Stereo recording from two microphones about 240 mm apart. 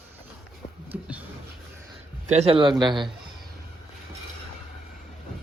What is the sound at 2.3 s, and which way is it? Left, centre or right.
Speech, right.